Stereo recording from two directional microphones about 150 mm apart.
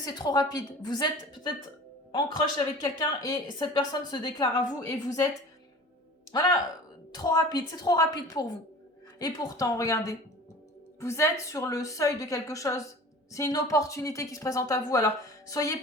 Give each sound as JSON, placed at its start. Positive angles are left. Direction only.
{"t": 0.0, "sound": "a woman's voice", "side_deg": 25}
{"t": 2.8, "sound": "a woman's voice", "side_deg": 25}
{"t": 6.3, "sound": "a woman's voice", "side_deg": 25}